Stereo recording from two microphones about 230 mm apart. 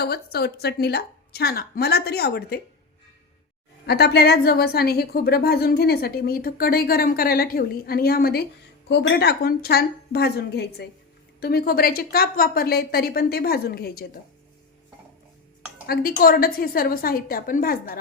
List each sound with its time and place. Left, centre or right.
0.0 s a woman's voice: left
3.8 s a woman's voice: left
15.9 s a woman's voice: left